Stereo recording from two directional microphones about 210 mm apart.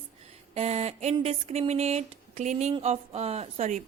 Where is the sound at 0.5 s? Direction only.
30° right (ahead or behind).